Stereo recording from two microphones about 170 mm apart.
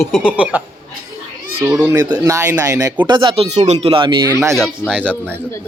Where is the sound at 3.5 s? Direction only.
40° right (ahead or behind).